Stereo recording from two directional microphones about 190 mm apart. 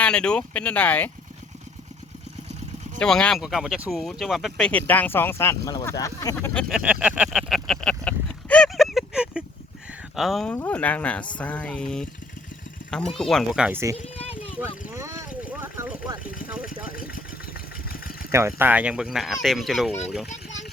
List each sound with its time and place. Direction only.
0.0 s speech: 5° left (ahead or behind)
3.0 s speech: 5° left (ahead or behind)
6.3 s a sound: 5° left (ahead or behind)
10.2 s speech: centre (ahead or behind)
13.9 s a sound: 30° left (ahead or behind)
14.6 s vehicle: 15° right (ahead or behind)
16.9 s vehicle: 50° left (ahead or behind)
17.8 s engine: 50° left (ahead or behind)
18.3 s speech: 15° right (ahead or behind)